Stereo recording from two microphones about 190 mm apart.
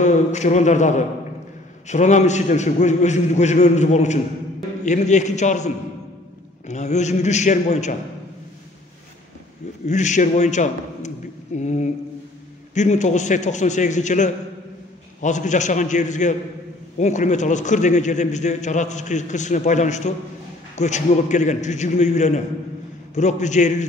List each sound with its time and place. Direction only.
0.0 s a man's voice: 40° left (ahead or behind)
6.7 s a man's voice: 35° left (ahead or behind)
9.8 s a man's voice: 40° left (ahead or behind)